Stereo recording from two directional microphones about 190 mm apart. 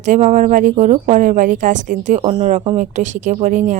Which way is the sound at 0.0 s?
40° right (ahead or behind).